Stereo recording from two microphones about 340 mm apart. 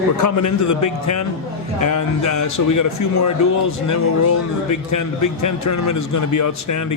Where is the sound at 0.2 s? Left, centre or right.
Left.